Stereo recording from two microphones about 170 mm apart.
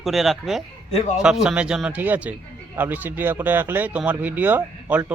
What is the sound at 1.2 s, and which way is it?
A man's voice, 5° right (ahead or behind).